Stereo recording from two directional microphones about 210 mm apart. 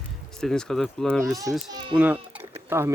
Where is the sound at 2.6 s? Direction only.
10° right (ahead or behind).